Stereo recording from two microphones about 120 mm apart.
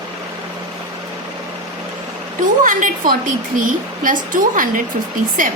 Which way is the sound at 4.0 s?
90° right.